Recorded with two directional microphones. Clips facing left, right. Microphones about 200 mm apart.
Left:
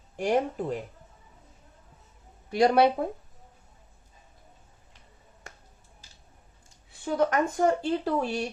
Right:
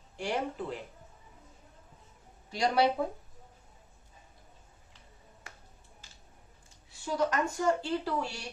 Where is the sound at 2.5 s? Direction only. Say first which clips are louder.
Left 7 dB; 55° left (ahead or behind).